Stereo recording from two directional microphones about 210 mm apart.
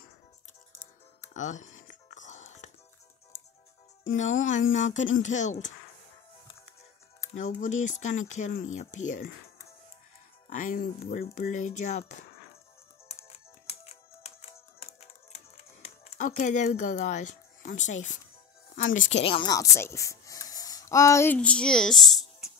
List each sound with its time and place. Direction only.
1.3 s a sound: 35° left (ahead or behind)
4.0 s speech: 35° left (ahead or behind)
7.3 s speech: 35° left (ahead or behind)
10.5 s speech: 40° left (ahead or behind)
13.7 s music: 30° left (ahead or behind)
18.8 s speech: 35° left (ahead or behind); by 22.5 s centre (ahead or behind)